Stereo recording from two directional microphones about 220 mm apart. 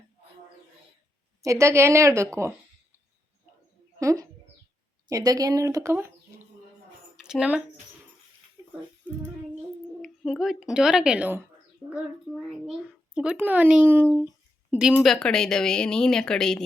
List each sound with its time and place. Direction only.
1.4 s a woman's voice: 15° right (ahead or behind)
4.0 s a woman's voice: 15° right (ahead or behind)
7.2 s speech: 5° right (ahead or behind)
8.6 s music: 10° right (ahead or behind)
10.0 s a woman's voice: centre (ahead or behind)